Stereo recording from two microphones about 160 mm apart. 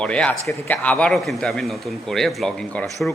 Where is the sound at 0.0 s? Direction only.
5° left (ahead or behind).